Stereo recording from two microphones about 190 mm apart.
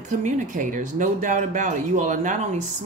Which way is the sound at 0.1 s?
40° right (ahead or behind).